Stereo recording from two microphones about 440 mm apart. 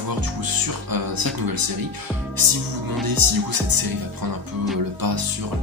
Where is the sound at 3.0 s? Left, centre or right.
Right.